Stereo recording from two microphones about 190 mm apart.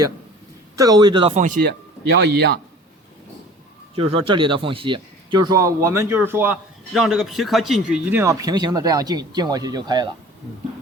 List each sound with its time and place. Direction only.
0.8 s speech: 20° right (ahead or behind)
1.4 s speech: 40° right (ahead or behind)
1.6 s speech: 60° right (ahead or behind)
3.9 s speech: 30° right (ahead or behind)